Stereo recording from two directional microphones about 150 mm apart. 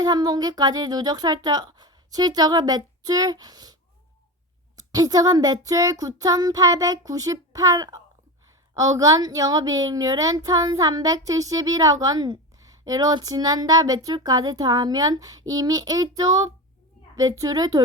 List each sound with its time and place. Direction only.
0.0 s speech: 25° right (ahead or behind)
4.8 s speech: 25° right (ahead or behind)